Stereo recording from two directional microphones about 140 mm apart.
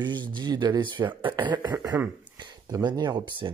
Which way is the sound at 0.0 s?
30° right (ahead or behind).